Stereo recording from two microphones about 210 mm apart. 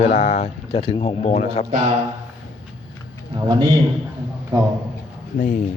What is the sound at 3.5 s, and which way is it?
Speech, 20° right (ahead or behind).